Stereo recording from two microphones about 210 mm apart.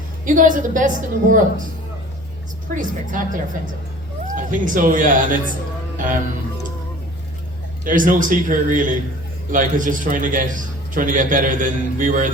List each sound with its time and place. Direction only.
0.3 s a man's voice: 40° right (ahead or behind)
2.7 s a man's voice: 40° right (ahead or behind)
7.9 s a man's voice: 40° right (ahead or behind)